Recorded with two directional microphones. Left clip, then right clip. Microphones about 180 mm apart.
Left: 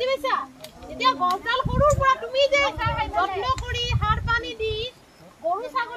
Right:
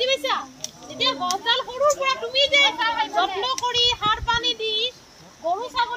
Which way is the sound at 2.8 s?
20° left (ahead or behind).